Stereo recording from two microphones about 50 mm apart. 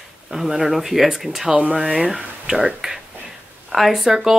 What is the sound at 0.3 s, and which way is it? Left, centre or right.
Speech, centre.